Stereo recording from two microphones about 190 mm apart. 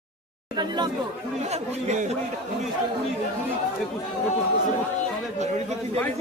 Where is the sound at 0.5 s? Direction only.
20° right (ahead or behind).